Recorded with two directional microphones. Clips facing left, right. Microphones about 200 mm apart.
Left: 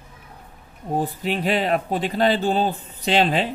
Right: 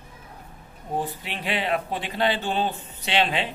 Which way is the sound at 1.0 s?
40° left (ahead or behind).